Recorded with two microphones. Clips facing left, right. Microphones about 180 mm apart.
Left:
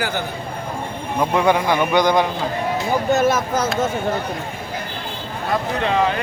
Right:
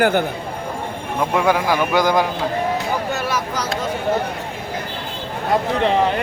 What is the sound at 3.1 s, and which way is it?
Speech, 45° left (ahead or behind).